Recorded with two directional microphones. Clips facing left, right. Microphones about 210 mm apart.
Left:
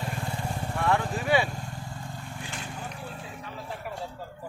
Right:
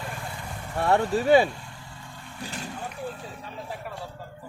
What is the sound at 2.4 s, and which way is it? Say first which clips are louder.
Vehicle: right 6 dB; 40° right (ahead or behind).